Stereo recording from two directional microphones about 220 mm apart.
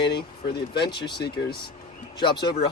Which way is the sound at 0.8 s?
50° left (ahead or behind).